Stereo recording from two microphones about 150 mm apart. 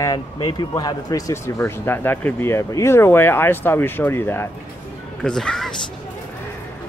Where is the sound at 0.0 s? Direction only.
25° left (ahead or behind).